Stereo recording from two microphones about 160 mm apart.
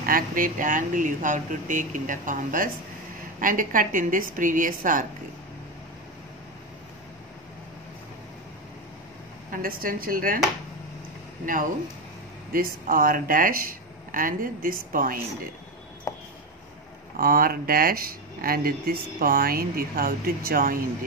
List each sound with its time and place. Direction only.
0.0 s speech: 60° right (ahead or behind)
9.5 s speech: 60° right (ahead or behind)
12.5 s speech: 60° right (ahead or behind)
17.2 s speech: 65° right (ahead or behind)